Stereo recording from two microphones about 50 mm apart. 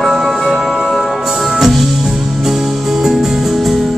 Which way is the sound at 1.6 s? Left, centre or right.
Centre.